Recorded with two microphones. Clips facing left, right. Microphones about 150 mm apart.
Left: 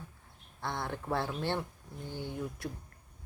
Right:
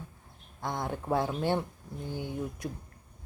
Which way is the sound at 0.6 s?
15° right (ahead or behind).